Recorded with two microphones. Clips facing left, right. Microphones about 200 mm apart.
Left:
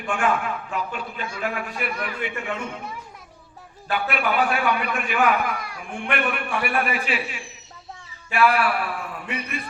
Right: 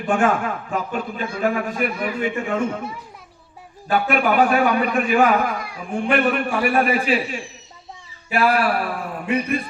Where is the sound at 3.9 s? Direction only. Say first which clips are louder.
Right 5 dB; 45° right (ahead or behind).